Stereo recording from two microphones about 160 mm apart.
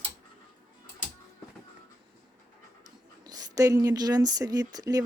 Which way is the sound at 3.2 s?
25° right (ahead or behind).